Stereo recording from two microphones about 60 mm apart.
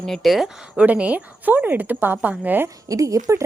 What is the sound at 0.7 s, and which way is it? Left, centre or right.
Speech, right.